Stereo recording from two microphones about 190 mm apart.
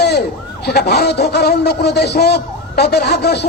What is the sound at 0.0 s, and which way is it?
A man's voice, 55° left (ahead or behind).